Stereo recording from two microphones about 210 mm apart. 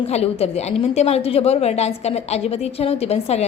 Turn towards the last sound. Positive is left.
turn(degrees=30)  # may be behind; listen again after turning